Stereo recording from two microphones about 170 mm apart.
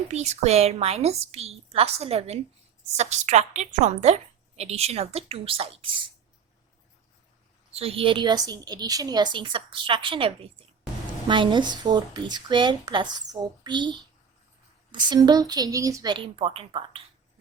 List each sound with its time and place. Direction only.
0.1 s a woman's voice: 40° right (ahead or behind)
7.7 s a woman's voice: 35° right (ahead or behind)
15.0 s a woman's voice: 25° right (ahead or behind)